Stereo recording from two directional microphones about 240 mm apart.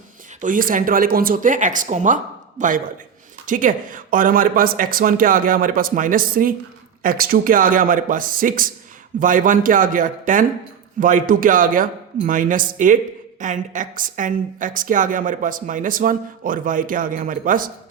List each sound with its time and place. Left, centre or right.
0.4 s a woman's voice: right